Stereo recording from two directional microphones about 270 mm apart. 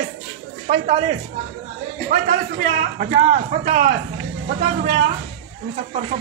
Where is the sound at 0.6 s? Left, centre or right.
Right.